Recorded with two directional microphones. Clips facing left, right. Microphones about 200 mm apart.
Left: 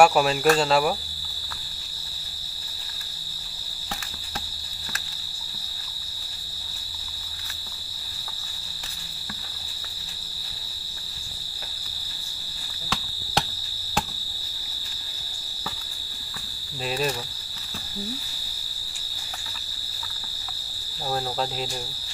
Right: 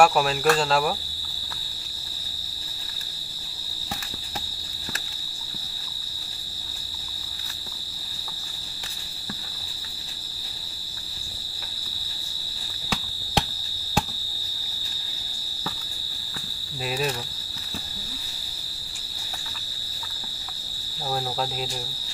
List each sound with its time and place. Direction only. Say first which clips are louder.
0.0 s speech: left 2 dB; centre (ahead or behind)